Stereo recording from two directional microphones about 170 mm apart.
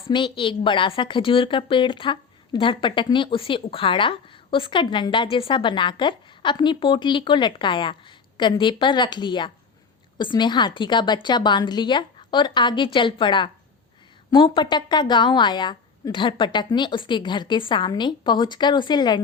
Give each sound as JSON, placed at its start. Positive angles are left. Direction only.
{"t": 0.3, "sound": "a woman's voice", "side_deg": 30}